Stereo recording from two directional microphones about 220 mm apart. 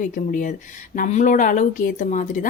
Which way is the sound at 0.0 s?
35° left (ahead or behind).